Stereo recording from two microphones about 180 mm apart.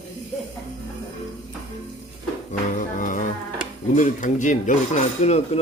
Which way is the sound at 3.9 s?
45° left (ahead or behind).